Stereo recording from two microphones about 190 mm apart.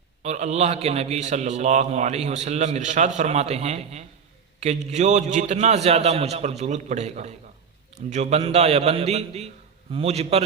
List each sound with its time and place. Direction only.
0.2 s a man's voice: 35° right (ahead or behind)